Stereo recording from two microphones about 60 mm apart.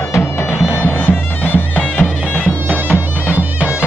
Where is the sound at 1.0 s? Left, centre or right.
Left.